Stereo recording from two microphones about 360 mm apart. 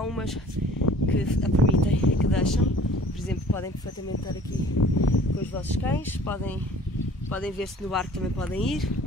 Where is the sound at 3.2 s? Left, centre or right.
Centre.